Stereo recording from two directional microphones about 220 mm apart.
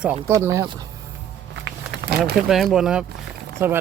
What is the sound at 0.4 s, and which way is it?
Speech, 15° right (ahead or behind).